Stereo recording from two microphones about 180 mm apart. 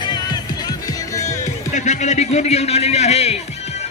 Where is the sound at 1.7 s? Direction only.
40° left (ahead or behind).